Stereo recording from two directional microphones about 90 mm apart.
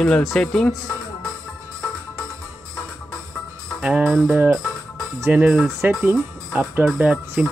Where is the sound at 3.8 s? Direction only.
15° right (ahead or behind).